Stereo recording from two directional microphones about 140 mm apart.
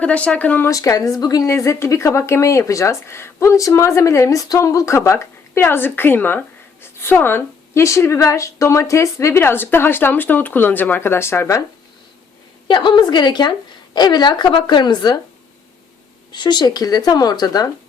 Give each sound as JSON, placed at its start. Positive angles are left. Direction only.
{"t": 0.0, "sound": "a woman's voice", "side_deg": 10}
{"t": 0.7, "sound": "a woman's voice", "side_deg": 25}
{"t": 12.6, "sound": "a woman's voice", "side_deg": 35}
{"t": 16.3, "sound": "speech", "side_deg": 30}